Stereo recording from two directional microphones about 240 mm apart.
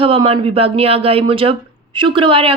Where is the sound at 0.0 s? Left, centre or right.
Right.